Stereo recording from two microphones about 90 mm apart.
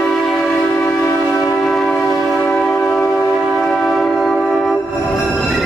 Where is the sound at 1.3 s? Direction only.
30° left (ahead or behind).